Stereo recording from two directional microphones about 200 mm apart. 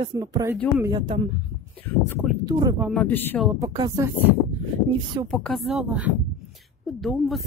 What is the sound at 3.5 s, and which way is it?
Speech, 20° right (ahead or behind).